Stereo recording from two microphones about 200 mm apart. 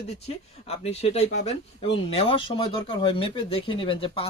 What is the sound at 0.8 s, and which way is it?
Speech, 30° left (ahead or behind).